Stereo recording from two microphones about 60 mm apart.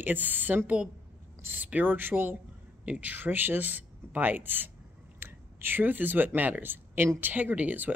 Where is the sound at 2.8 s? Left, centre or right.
Right.